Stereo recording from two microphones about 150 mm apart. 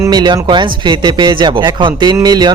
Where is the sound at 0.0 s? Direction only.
30° right (ahead or behind).